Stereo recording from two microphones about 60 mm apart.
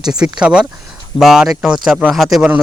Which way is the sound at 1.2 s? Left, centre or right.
Centre.